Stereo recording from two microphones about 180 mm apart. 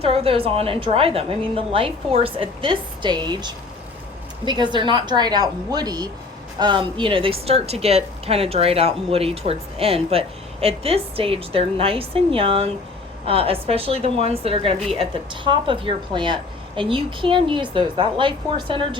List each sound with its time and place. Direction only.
0.0 s a woman's voice: 35° right (ahead or behind)